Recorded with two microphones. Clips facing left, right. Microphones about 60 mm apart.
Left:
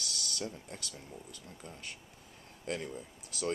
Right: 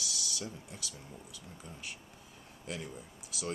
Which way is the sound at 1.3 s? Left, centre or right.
Left.